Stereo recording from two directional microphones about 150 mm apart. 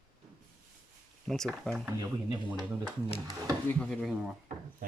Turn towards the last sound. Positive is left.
turn(degrees=0)  # may be behind; listen again after turning